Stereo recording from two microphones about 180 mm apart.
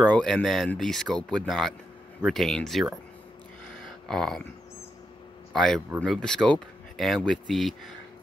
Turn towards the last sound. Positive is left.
turn(degrees=0)  # may be behind; listen again after turning